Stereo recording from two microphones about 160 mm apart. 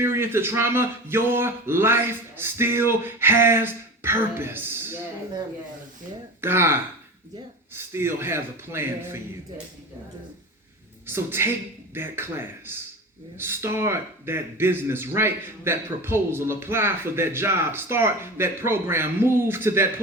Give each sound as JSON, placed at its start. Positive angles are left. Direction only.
{"t": 0.0, "sound": "speech", "side_deg": -15}
{"t": 6.4, "sound": "speech", "side_deg": -15}
{"t": 11.0, "sound": "speech", "side_deg": -15}